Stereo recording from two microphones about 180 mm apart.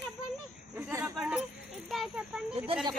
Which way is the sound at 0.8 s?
10° right (ahead or behind).